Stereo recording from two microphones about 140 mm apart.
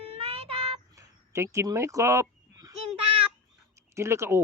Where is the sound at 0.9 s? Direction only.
20° right (ahead or behind).